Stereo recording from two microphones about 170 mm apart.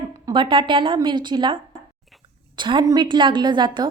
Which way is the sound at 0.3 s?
25° right (ahead or behind).